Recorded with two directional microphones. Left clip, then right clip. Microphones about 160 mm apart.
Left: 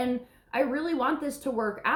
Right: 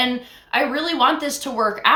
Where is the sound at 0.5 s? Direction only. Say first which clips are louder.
Right 8 dB; 15° right (ahead or behind).